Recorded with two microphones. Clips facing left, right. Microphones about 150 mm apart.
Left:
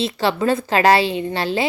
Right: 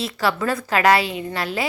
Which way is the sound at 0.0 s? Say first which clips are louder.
Left 3 dB; 25° left (ahead or behind).